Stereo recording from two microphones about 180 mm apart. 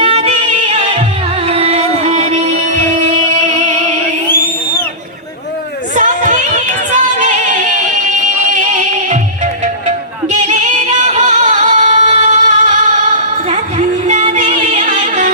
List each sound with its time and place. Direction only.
0.0 s music: 30° right (ahead or behind)
6.0 s a sound: 45° right (ahead or behind)
10.4 s music: 40° right (ahead or behind)